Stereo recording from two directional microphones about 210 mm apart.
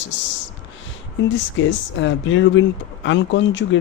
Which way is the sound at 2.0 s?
60° left (ahead or behind).